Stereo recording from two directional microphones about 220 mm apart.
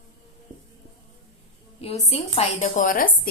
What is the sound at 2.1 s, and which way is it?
Speech, 25° left (ahead or behind).